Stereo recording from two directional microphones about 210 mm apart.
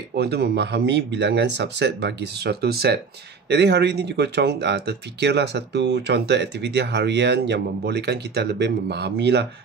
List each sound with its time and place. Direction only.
0.1 s speech: 50° right (ahead or behind)